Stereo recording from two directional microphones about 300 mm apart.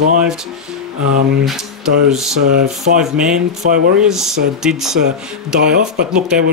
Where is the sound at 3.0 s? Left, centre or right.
Centre.